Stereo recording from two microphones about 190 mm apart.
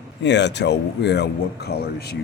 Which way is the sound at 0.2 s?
65° left (ahead or behind).